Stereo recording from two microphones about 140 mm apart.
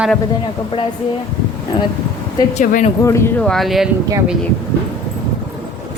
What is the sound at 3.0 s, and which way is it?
Speech, 20° left (ahead or behind).